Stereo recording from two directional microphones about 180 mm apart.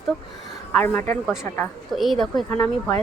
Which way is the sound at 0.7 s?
10° left (ahead or behind).